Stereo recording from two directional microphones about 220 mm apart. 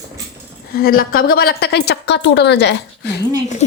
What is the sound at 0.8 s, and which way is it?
A woman's voice, 40° left (ahead or behind).